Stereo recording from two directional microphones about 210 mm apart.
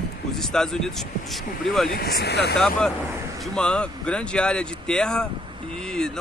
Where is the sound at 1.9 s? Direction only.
50° left (ahead or behind).